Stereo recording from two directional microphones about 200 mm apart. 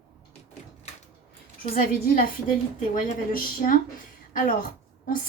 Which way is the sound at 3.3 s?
45° left (ahead or behind).